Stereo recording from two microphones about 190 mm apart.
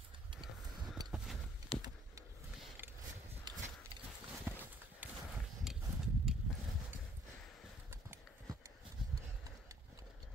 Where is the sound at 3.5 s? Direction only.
20° right (ahead or behind).